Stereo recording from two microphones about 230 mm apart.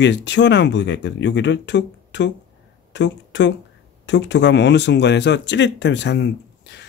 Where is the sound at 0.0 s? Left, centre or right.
Left.